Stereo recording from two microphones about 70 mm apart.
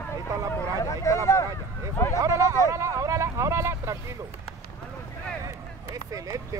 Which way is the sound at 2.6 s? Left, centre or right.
Right.